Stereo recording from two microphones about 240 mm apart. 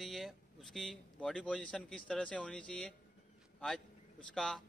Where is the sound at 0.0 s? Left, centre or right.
Centre.